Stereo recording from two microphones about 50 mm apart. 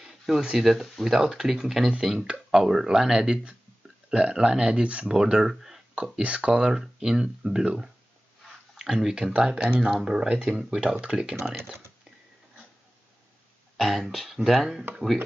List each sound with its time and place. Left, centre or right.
0.4 s speech: centre
0.7 s speech: centre
6.2 s speech: right
6.7 s speech: centre
10.3 s speech: right
13.7 s speech: centre